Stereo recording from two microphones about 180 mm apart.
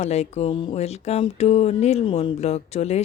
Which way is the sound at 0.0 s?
40° left (ahead or behind).